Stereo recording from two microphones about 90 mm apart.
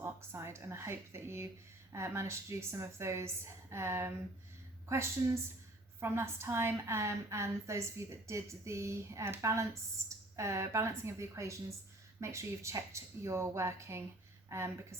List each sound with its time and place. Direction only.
0.0 s a woman's voice: 30° right (ahead or behind)